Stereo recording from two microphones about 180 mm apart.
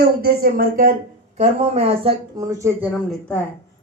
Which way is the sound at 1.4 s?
35° right (ahead or behind).